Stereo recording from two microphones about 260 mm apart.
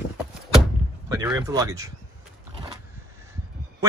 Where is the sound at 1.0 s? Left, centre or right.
Centre.